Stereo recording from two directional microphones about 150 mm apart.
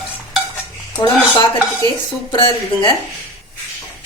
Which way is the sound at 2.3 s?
35° left (ahead or behind).